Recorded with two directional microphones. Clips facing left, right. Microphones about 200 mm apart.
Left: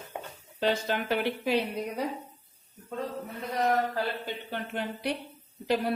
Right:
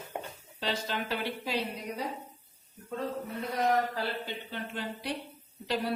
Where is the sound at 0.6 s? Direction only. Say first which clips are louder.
Left 6 dB; 55° left (ahead or behind).